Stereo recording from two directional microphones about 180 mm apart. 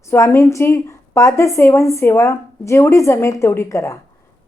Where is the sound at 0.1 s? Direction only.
15° left (ahead or behind).